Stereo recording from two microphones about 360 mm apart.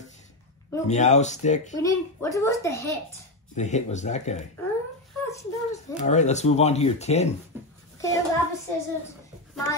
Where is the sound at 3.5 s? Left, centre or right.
Centre.